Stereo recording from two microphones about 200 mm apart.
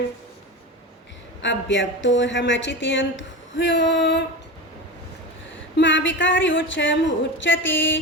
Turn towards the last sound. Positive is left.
turn(degrees=65)  # may be behind; listen again after turning